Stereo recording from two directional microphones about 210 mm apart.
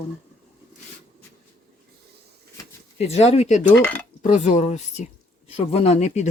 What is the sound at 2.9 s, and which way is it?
Speech, 30° left (ahead or behind).